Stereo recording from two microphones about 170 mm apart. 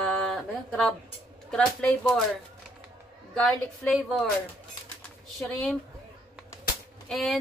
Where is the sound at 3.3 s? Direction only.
5° left (ahead or behind).